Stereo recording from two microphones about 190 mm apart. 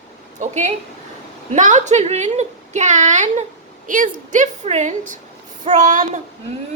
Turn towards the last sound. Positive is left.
turn(degrees=-40)  # may be behind; listen again after turning